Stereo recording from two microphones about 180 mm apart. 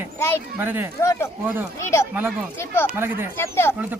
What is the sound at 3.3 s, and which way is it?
Speech, 15° left (ahead or behind).